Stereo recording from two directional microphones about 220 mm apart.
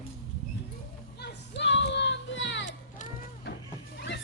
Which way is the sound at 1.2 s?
50° left (ahead or behind).